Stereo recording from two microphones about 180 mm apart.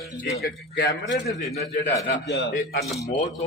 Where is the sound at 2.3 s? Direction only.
70° left (ahead or behind).